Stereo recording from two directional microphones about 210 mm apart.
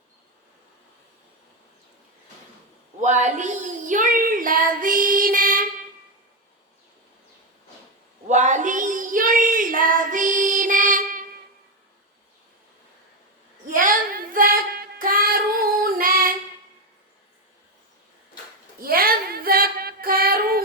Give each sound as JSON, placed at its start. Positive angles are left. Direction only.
{"t": 3.0, "sound": "child singing", "side_deg": -35}
{"t": 8.3, "sound": "child singing", "side_deg": -35}
{"t": 13.7, "sound": "female singing", "side_deg": -40}
{"t": 18.8, "sound": "female singing", "side_deg": -45}